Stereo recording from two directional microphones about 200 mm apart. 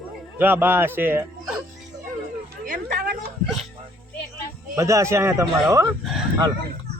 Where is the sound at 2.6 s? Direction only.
45° right (ahead or behind).